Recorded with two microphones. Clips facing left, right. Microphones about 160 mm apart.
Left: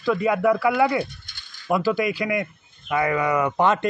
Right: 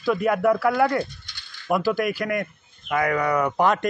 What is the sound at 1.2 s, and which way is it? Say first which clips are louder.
Mechanisms: right 2 dB; 50° left (ahead or behind).